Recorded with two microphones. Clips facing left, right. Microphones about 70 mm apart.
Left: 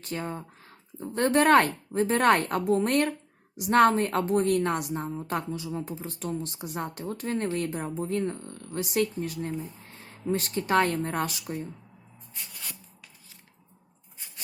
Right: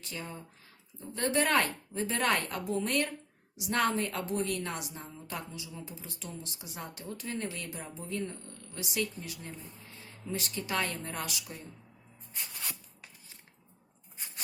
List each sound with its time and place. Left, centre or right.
0.0 s speech: left